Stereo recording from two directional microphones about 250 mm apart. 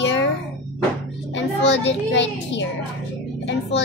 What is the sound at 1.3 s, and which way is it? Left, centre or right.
A child's voice, left.